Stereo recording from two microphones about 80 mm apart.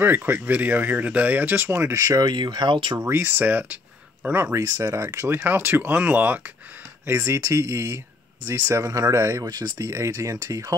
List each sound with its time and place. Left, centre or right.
0.0 s speech: right
2.0 s speech: right
3.0 s speech: right
7.1 s speech: right
9.8 s speech: right